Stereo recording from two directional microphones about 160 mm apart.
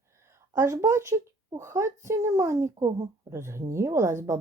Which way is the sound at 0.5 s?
15° right (ahead or behind).